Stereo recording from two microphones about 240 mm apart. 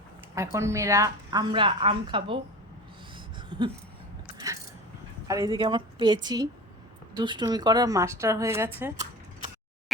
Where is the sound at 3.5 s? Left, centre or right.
Centre.